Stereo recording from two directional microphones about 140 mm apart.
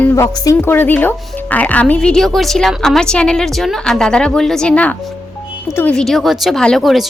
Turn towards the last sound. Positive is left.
turn(degrees=0)  # may be behind; listen again after turning